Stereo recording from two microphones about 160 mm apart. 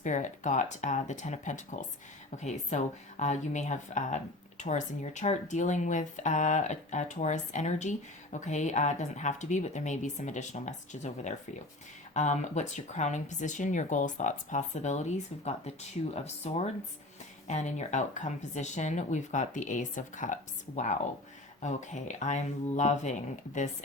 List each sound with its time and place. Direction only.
0.0 s speech: 50° left (ahead or behind)